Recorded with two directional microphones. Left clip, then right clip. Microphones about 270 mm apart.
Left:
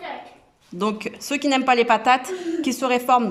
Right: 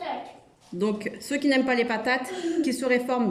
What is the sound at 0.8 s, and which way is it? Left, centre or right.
Speech, centre.